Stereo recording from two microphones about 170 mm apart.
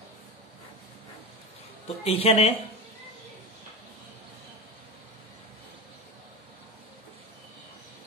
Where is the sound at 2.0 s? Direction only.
35° left (ahead or behind).